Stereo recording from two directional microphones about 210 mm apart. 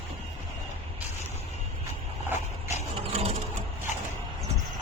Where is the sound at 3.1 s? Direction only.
30° right (ahead or behind).